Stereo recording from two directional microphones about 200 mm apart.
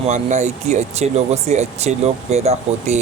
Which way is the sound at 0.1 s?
35° right (ahead or behind).